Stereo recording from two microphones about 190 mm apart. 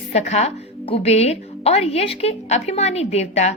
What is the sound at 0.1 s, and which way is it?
A woman's voice, 35° left (ahead or behind).